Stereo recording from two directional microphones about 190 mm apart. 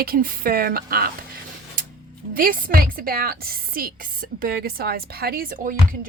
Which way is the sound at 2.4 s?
50° right (ahead or behind).